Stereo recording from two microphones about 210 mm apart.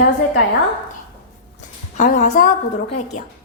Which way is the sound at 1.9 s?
35° left (ahead or behind).